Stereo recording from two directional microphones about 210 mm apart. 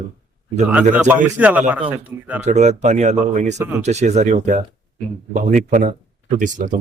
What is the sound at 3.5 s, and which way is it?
Speech, 10° right (ahead or behind).